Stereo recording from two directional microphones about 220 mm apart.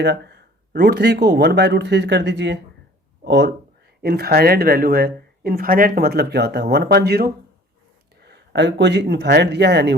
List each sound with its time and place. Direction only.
0.0 s speech: 50° right (ahead or behind)